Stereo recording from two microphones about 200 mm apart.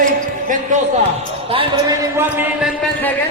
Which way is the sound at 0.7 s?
40° right (ahead or behind).